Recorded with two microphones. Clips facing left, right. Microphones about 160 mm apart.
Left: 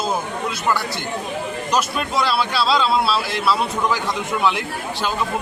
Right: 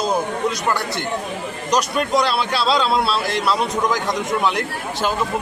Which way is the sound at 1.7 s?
Centre (ahead or behind).